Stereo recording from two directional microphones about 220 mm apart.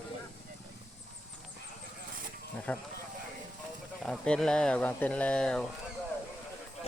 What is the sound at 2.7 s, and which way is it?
Speech, 5° left (ahead or behind).